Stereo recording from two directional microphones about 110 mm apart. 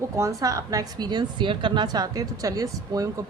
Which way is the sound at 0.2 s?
30° right (ahead or behind).